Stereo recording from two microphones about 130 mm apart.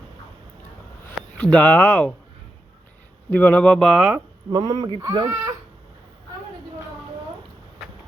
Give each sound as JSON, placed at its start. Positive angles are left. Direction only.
{"t": 1.4, "sound": "speech", "side_deg": 10}
{"t": 3.2, "sound": "speech", "side_deg": 10}
{"t": 4.5, "sound": "speech", "side_deg": -30}